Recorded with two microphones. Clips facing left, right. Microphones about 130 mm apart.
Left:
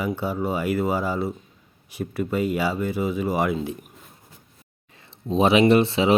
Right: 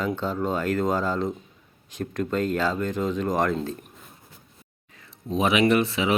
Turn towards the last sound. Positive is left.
turn(degrees=30)  # may be behind; listen again after turning